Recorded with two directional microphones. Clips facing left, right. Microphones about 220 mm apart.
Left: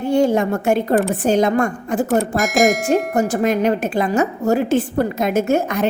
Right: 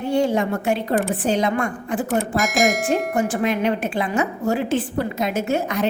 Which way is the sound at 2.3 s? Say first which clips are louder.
Left 4 dB; centre (ahead or behind).